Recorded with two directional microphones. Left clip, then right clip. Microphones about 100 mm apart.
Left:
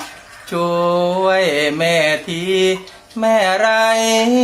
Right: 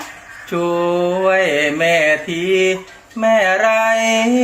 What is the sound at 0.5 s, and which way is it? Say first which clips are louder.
Mantra: left 1 dB; 30° left (ahead or behind).